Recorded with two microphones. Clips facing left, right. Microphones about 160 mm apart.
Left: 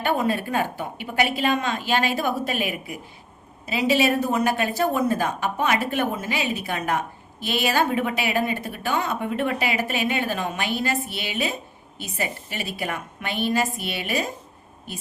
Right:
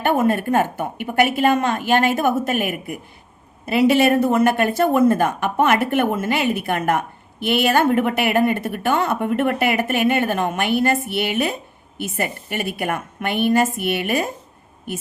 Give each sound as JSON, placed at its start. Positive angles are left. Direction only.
{"t": 0.0, "sound": "a woman's voice", "side_deg": -55}